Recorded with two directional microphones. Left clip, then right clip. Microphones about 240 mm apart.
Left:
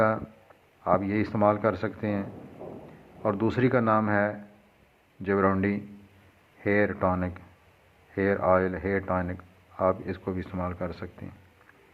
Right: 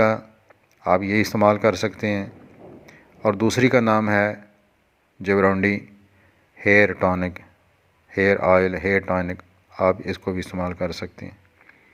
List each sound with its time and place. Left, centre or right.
0.9 s speech: right
3.2 s speech: right